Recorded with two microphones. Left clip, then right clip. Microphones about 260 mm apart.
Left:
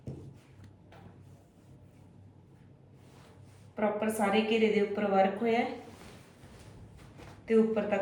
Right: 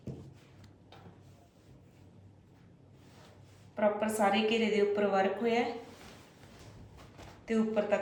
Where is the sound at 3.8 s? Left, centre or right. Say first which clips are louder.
Right 1 dB; centre.